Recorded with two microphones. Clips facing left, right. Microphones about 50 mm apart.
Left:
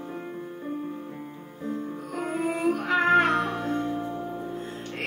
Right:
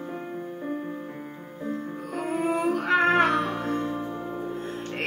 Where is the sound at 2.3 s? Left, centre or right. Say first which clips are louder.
Right 1 dB; right.